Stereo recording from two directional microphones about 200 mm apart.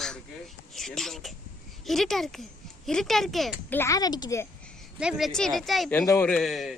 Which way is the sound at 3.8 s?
20° left (ahead or behind).